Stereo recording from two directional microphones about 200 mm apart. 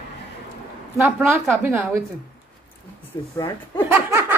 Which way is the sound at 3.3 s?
15° left (ahead or behind).